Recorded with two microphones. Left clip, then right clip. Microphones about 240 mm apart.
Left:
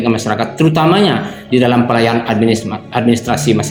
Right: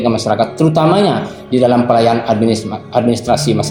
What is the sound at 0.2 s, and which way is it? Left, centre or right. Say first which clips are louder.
Speech: right 2 dB; left.